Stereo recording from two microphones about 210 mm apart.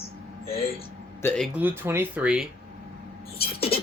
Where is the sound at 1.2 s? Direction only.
5° left (ahead or behind).